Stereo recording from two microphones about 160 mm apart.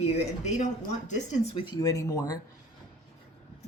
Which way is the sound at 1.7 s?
20° left (ahead or behind).